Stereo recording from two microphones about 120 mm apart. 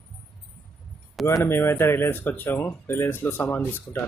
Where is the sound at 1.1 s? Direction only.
Centre (ahead or behind).